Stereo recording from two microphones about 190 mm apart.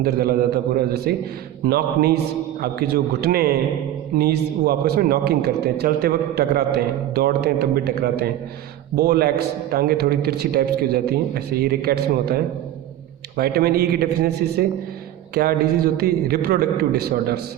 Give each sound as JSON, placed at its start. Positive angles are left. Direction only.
{"t": 0.0, "sound": "a man's voice", "side_deg": -55}
{"t": 15.4, "sound": "a man's voice", "side_deg": -55}